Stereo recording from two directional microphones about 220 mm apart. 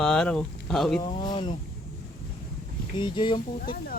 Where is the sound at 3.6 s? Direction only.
40° left (ahead or behind).